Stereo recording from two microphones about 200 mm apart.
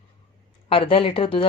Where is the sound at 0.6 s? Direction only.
25° left (ahead or behind).